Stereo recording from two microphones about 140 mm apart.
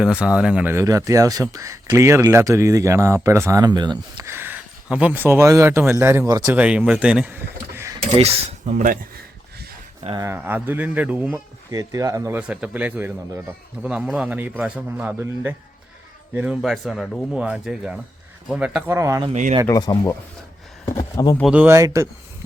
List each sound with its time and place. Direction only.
0.0 s speech: 5° right (ahead or behind); by 4.3 s 30° right (ahead or behind)
4.3 s a man's voice: 15° right (ahead or behind)
8.1 s speech: 45° right (ahead or behind)
10.2 s a man's voice: 15° right (ahead or behind)
11.7 s speech: 25° right (ahead or behind)
12.4 s a man's voice: 10° right (ahead or behind)
18.9 s speech: 20° right (ahead or behind)
19.3 s speech: 55° right (ahead or behind)
19.6 s speech: 25° left (ahead or behind)
21.4 s a man's voice: 10° right (ahead or behind)
21.8 s speech: 20° right (ahead or behind)